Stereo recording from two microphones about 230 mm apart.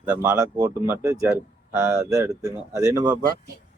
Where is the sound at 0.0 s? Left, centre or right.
Centre.